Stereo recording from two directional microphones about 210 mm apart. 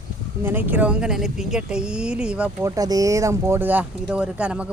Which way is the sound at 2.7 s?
15° right (ahead or behind).